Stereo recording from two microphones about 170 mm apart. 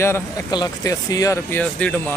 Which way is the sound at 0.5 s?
20° left (ahead or behind).